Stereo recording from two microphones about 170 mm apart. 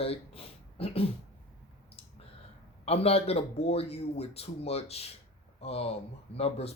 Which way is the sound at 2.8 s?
35° left (ahead or behind).